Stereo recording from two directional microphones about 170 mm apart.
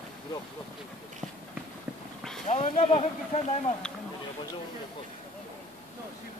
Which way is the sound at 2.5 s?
40° left (ahead or behind).